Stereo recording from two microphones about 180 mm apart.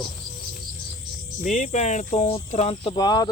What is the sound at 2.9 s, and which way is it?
Speech, 20° left (ahead or behind).